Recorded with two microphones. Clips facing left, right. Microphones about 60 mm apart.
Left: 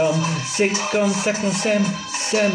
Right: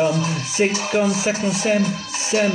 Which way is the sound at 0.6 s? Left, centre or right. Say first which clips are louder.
Right 1 dB; centre.